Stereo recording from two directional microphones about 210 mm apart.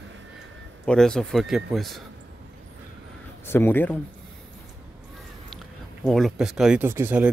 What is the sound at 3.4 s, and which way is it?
Speech, 10° left (ahead or behind).